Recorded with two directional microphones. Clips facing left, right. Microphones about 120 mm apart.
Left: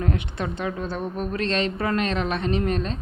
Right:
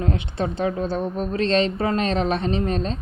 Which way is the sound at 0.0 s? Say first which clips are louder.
Right 2 dB; 30° right (ahead or behind).